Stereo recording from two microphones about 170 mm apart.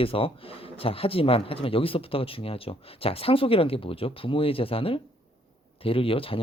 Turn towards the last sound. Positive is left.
turn(degrees=35)  # may be behind; listen again after turning